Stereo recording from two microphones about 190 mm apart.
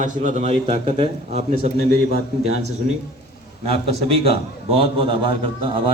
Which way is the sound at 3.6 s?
30° right (ahead or behind).